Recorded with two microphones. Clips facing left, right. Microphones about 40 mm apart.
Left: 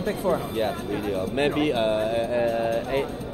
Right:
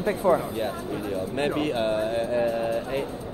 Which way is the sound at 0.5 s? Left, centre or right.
Left.